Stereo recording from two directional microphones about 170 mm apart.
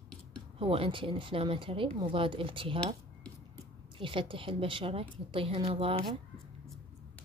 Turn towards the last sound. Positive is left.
turn(degrees=-30)  # may be behind; listen again after turning